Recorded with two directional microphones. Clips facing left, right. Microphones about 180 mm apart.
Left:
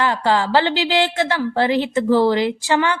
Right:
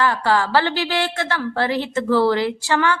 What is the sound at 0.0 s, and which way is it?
A woman's voice, 20° left (ahead or behind).